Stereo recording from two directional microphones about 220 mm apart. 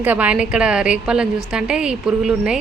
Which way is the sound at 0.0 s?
5° right (ahead or behind).